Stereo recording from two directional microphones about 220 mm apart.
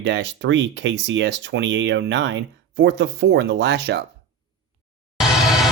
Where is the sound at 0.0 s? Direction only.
55° right (ahead or behind).